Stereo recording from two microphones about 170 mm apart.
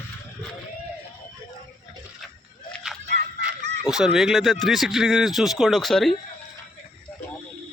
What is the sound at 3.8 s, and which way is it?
Speech, 5° right (ahead or behind).